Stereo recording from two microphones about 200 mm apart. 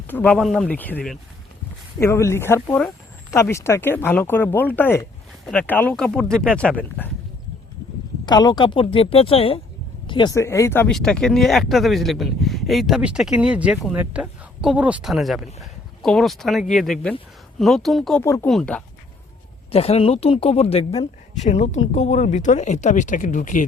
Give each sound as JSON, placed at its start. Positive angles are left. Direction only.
{"t": 0.1, "sound": "speech", "side_deg": 5}
{"t": 8.2, "sound": "a woman's voice", "side_deg": 20}
{"t": 19.7, "sound": "a woman's voice", "side_deg": 30}